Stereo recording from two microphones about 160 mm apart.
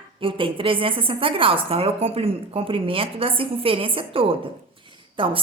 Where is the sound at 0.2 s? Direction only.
35° right (ahead or behind).